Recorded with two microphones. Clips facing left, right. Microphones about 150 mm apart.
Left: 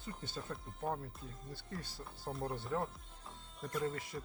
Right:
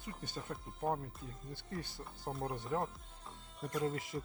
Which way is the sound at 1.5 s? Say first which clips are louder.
Right 3 dB; 25° right (ahead or behind).